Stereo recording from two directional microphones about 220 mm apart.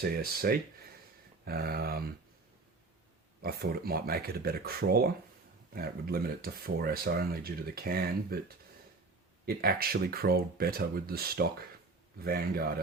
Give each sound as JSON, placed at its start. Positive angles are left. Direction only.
{"t": 0.0, "sound": "speech", "side_deg": -45}
{"t": 3.4, "sound": "speech", "side_deg": -45}
{"t": 9.5, "sound": "speech", "side_deg": -45}